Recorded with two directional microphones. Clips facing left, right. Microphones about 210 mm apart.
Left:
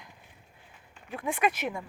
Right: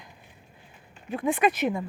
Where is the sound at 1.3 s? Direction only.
5° left (ahead or behind).